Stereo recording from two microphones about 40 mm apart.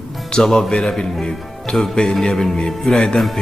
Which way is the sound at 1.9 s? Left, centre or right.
Left.